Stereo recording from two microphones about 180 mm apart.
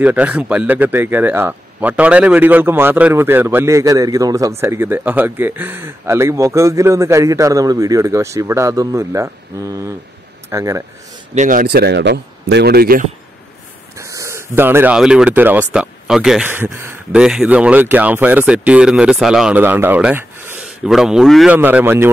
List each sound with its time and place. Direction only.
0.0 s speech: 10° right (ahead or behind)
11.3 s speech: 50° right (ahead or behind)
13.9 s speech: 15° right (ahead or behind)